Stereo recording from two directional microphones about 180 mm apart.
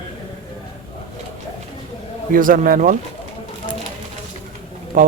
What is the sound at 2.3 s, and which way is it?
Speech, 50° right (ahead or behind).